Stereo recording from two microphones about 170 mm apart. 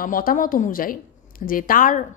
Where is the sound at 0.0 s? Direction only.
55° left (ahead or behind).